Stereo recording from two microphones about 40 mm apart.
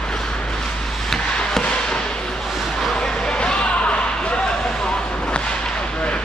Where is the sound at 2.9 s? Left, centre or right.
Centre.